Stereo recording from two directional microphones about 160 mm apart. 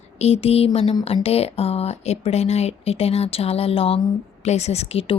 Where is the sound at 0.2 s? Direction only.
40° left (ahead or behind).